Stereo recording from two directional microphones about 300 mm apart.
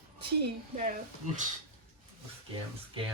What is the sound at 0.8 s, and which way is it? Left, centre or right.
Speech, right.